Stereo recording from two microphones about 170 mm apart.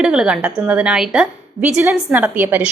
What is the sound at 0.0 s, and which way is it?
A woman's voice, 5° right (ahead or behind).